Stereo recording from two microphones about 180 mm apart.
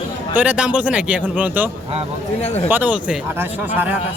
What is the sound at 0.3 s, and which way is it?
Speech, 5° right (ahead or behind).